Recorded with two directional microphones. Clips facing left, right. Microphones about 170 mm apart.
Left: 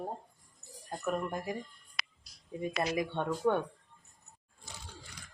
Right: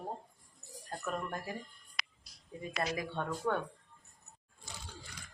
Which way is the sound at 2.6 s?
20° left (ahead or behind).